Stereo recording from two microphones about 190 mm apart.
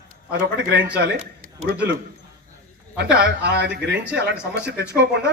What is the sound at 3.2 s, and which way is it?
A man's voice, 60° right (ahead or behind).